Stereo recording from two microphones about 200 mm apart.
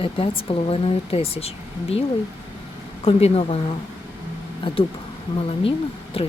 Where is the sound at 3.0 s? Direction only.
30° left (ahead or behind).